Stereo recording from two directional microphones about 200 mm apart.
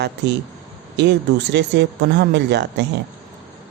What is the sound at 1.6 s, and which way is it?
A man's voice, 60° right (ahead or behind).